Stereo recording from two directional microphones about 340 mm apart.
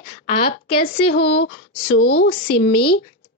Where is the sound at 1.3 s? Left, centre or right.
Left.